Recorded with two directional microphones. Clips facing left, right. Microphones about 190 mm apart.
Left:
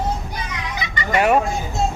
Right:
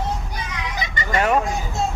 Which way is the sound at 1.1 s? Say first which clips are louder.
Left 3 dB; 10° left (ahead or behind).